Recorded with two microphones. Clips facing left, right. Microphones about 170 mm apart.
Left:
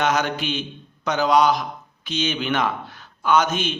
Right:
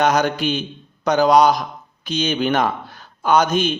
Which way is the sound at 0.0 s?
40° right (ahead or behind).